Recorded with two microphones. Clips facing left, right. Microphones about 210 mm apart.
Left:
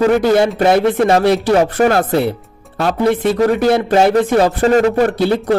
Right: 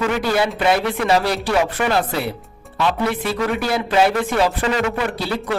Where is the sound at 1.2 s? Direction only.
20° left (ahead or behind).